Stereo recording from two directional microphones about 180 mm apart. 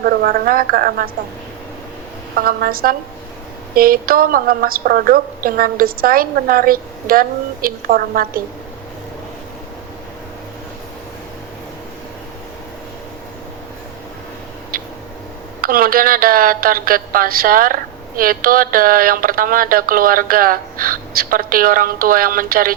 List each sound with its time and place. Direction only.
0.0 s a woman's voice: 55° right (ahead or behind)
2.4 s a woman's voice: 55° right (ahead or behind)
14.7 s a sound: 55° right (ahead or behind)
15.6 s a woman's voice: 55° right (ahead or behind)